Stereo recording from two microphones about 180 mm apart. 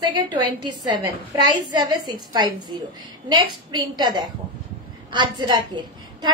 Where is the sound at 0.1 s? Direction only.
25° right (ahead or behind).